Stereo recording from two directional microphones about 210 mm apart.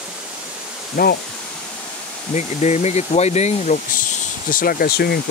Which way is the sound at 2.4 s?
35° left (ahead or behind).